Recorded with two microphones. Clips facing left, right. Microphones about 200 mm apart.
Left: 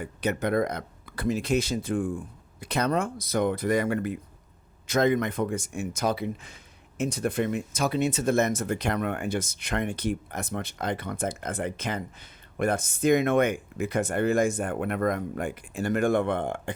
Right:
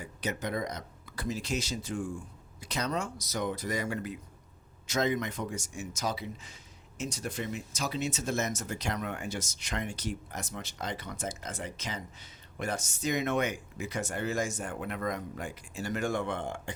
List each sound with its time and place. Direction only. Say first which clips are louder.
0.0 s speech: left 7 dB; 60° left (ahead or behind)